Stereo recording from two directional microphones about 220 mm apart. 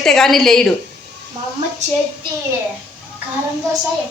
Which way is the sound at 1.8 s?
30° right (ahead or behind).